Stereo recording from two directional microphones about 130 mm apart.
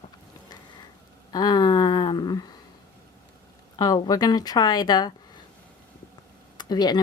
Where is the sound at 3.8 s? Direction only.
30° left (ahead or behind).